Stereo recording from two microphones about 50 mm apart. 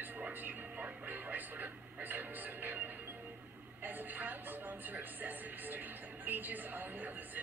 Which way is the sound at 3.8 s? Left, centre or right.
Right.